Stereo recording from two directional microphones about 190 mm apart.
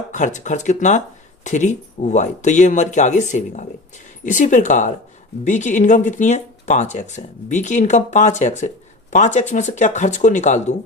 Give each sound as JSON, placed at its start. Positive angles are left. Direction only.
{"t": 0.1, "sound": "speech", "side_deg": 40}